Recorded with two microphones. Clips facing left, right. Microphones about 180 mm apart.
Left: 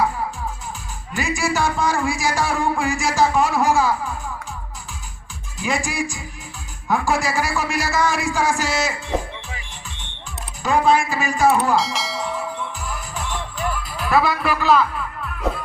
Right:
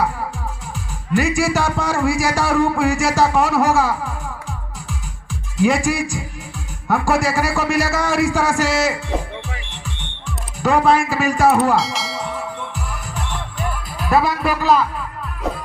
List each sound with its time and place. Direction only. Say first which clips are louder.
1.1 s music: right 5 dB; 70° right (ahead or behind)
5.5 s a man's voice: right 7 dB; 65° right (ahead or behind)
10.6 s music: right 2 dB; 65° right (ahead or behind)
11.8 s church bell: right 1 dB; centre (ahead or behind)
12.8 s music: even; 65° right (ahead or behind)
14.0 s a man's voice: right 2 dB; 45° right (ahead or behind)